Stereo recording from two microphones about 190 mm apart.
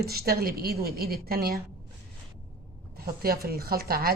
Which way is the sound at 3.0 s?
50° right (ahead or behind).